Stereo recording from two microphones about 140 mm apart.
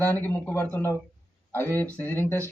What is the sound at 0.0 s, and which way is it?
Speech, 15° left (ahead or behind).